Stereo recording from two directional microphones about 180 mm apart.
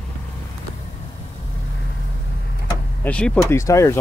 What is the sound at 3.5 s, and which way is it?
Speech, 15° left (ahead or behind).